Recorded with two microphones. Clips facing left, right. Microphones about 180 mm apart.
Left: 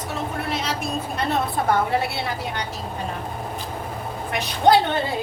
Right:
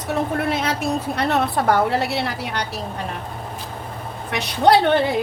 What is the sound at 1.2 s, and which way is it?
A woman's voice, 70° right (ahead or behind).